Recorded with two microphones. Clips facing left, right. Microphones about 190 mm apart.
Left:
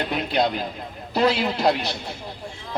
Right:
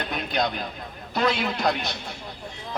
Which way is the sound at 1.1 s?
35° left (ahead or behind).